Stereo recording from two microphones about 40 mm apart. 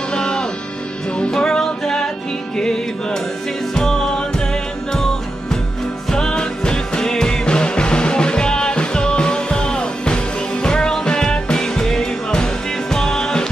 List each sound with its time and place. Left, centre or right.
0.1 s music: centre
4.9 s music: centre